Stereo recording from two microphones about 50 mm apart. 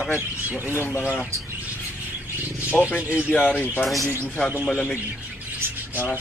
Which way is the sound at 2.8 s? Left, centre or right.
Left.